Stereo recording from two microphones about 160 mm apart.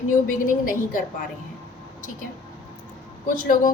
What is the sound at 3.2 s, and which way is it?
Speech, 55° left (ahead or behind).